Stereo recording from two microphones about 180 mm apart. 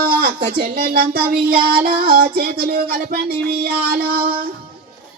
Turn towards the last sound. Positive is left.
turn(degrees=-55)  # may be behind; listen again after turning